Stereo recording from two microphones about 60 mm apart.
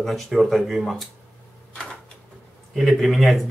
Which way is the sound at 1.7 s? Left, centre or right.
Centre.